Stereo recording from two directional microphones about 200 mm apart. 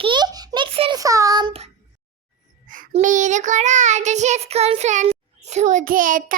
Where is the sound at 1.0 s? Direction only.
15° right (ahead or behind).